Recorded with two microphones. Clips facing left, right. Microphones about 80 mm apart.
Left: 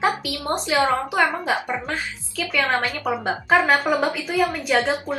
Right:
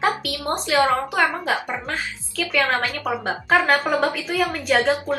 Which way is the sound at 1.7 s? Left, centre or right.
Centre.